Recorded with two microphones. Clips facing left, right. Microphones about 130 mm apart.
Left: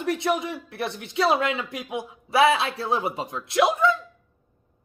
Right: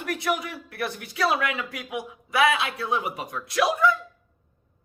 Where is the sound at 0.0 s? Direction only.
25° left (ahead or behind).